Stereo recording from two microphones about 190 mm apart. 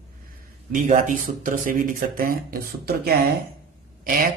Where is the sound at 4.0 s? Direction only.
50° right (ahead or behind).